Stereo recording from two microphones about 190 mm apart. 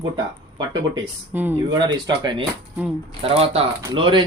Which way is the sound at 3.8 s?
25° right (ahead or behind).